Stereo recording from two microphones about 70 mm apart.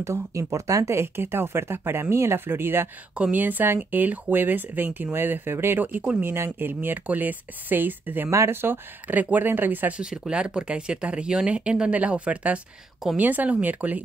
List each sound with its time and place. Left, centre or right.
0.0 s speech: right
0.9 s speech: right
6.2 s speech: right
8.3 s speech: right
9.9 s speech: centre